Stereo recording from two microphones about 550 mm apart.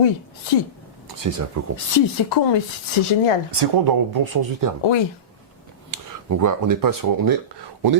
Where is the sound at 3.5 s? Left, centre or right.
Right.